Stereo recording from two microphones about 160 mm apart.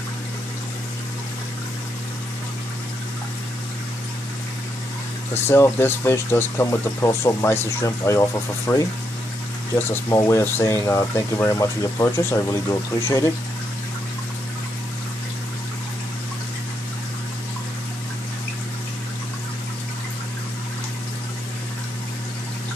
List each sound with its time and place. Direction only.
5.3 s speech: 15° left (ahead or behind)